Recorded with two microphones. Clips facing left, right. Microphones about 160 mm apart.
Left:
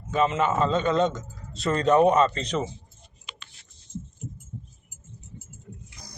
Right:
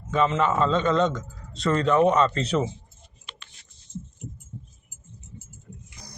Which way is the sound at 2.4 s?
5° right (ahead or behind).